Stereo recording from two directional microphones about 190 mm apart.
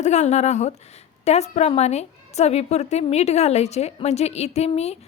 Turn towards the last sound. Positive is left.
turn(degrees=35)  # may be behind; listen again after turning